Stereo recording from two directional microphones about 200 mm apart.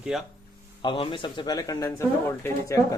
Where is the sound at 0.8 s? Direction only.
25° left (ahead or behind).